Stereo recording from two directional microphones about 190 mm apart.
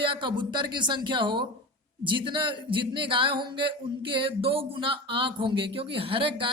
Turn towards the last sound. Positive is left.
turn(degrees=-30)  # may be behind; listen again after turning